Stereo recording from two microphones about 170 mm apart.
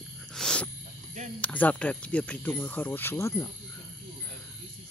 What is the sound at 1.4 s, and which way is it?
Speech, 10° left (ahead or behind).